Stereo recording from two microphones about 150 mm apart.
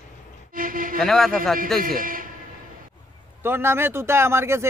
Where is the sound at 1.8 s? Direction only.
70° right (ahead or behind).